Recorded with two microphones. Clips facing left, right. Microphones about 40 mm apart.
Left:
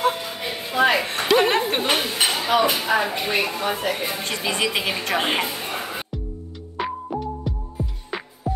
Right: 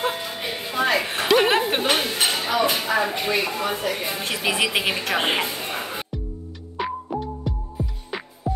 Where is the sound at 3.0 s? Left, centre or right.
Centre.